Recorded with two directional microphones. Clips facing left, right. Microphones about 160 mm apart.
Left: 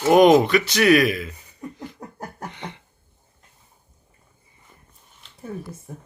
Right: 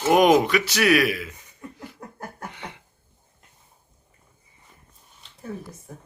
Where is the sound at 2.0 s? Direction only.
15° left (ahead or behind).